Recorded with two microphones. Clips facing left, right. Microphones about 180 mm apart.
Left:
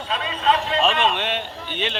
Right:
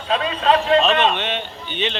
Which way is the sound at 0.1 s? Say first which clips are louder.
Right 4 dB; 55° right (ahead or behind).